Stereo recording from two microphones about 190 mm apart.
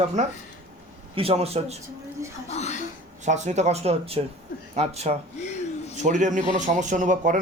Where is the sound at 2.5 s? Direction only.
35° left (ahead or behind).